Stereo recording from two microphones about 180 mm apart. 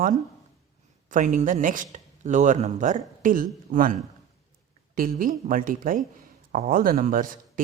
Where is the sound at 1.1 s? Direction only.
45° right (ahead or behind).